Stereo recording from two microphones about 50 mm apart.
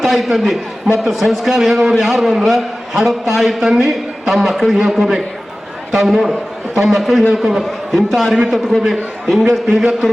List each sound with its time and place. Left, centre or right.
0.0 s a man's voice: centre
9.7 s a man's voice: centre